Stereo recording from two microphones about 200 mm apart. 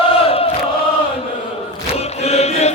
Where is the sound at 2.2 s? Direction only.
30° left (ahead or behind).